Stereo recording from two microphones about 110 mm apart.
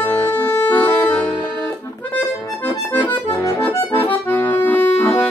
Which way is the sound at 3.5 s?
20° left (ahead or behind).